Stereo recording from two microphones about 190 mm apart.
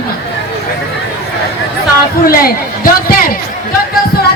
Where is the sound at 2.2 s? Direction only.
50° left (ahead or behind).